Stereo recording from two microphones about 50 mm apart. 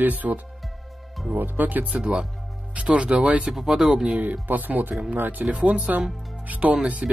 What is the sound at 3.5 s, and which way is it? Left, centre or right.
Speech, centre.